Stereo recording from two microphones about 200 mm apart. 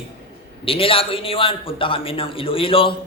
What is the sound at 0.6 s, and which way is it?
A man's voice, 25° left (ahead or behind).